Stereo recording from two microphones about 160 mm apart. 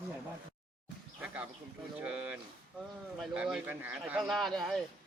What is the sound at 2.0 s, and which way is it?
Speech, 5° right (ahead or behind).